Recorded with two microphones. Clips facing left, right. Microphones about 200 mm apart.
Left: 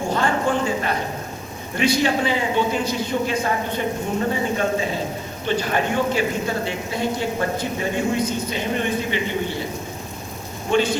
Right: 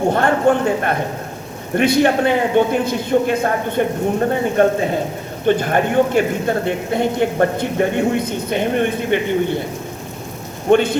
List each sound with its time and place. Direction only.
0.1 s speech: 60° right (ahead or behind)
10.7 s speech: 55° right (ahead or behind)